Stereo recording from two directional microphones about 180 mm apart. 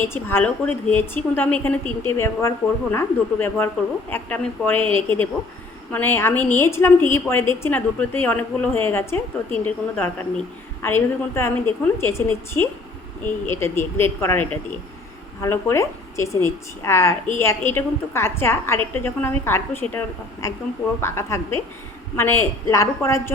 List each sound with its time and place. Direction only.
0.0 s a woman's voice: 10° left (ahead or behind)